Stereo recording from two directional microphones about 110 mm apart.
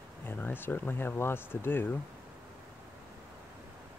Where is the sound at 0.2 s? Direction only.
20° left (ahead or behind).